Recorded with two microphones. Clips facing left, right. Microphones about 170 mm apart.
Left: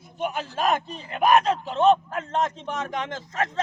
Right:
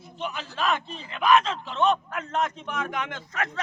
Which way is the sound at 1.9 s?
30° left (ahead or behind).